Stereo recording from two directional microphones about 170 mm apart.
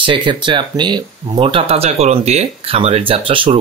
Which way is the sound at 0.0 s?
30° right (ahead or behind).